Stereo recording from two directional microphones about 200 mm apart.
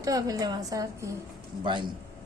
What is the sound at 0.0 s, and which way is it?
A woman's voice, 15° right (ahead or behind).